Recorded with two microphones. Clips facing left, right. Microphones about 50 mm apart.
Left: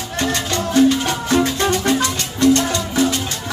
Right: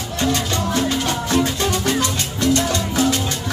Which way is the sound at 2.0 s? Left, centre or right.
Left.